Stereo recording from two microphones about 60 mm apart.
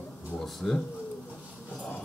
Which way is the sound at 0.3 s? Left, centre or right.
Centre.